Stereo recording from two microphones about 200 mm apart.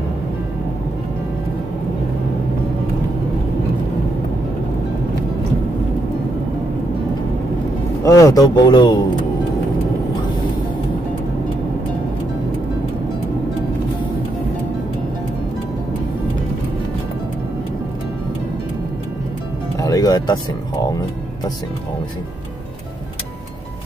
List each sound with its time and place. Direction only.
8.0 s a man's voice: 15° left (ahead or behind)
19.8 s music: 20° left (ahead or behind)